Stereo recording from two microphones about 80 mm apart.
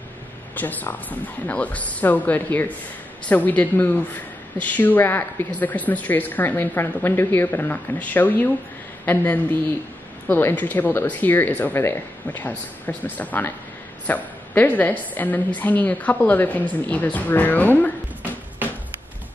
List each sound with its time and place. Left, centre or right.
0.6 s a woman's voice: left